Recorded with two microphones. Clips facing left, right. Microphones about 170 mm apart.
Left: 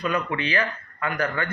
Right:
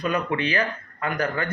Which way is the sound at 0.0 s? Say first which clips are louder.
Right 1 dB; 45° right (ahead or behind).